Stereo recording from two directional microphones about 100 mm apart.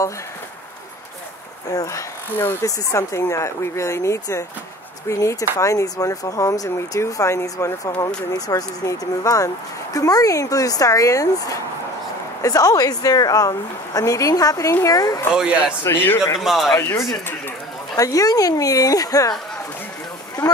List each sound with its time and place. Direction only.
1.7 s speech: 35° left (ahead or behind)
2.3 s speech: 20° left (ahead or behind)
15.8 s speech: 25° left (ahead or behind)
16.3 s speech: centre (ahead or behind)
16.7 s speech: 30° left (ahead or behind)